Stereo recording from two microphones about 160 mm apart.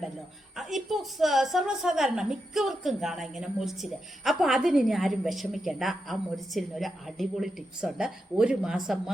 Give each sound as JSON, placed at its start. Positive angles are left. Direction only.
{"t": 0.5, "sound": "a woman's voice", "side_deg": 0}